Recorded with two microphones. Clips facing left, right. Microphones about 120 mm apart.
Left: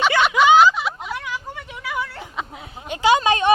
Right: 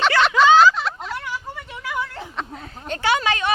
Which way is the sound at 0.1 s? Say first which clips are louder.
Right 1 dB; 10° left (ahead or behind).